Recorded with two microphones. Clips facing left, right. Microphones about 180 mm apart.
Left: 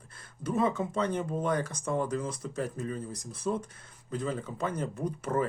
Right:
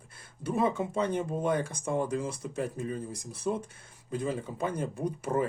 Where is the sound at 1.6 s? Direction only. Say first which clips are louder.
Even; 25° right (ahead or behind).